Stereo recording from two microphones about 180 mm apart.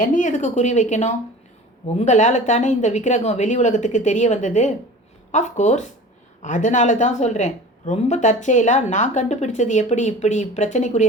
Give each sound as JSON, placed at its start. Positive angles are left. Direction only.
{"t": 0.0, "sound": "speech", "side_deg": 45}